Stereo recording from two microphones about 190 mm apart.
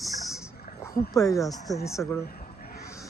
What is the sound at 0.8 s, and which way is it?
Speech, 15° left (ahead or behind).